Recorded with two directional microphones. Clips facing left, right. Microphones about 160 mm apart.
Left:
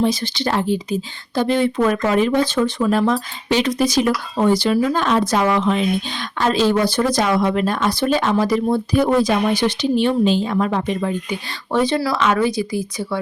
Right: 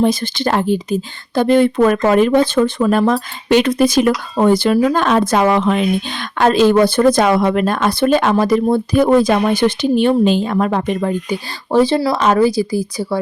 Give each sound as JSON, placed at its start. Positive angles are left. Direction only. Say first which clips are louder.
{"t": 0.0, "sound": "speech", "louder": "right 4 dB", "side_deg": -50}
{"t": 11.3, "sound": "speech", "louder": "right 5 dB", "side_deg": -35}